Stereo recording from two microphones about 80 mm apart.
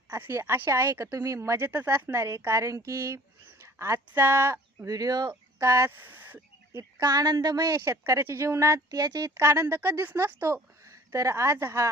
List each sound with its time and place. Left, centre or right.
0.2 s a woman's voice: right
1.5 s a woman's voice: right
4.9 s speech: right
5.5 s a woman's voice: right
6.0 s speech: right
7.0 s speech: right
7.8 s a woman's voice: right
9.0 s speech: right
9.3 s a woman's voice: right